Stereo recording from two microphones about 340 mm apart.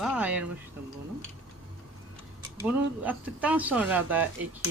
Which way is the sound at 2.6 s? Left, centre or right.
Centre.